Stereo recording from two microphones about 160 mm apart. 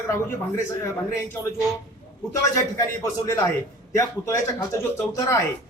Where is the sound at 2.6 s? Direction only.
20° left (ahead or behind).